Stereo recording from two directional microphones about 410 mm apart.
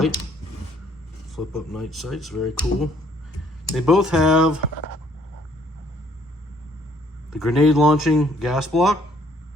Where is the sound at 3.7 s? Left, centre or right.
Centre.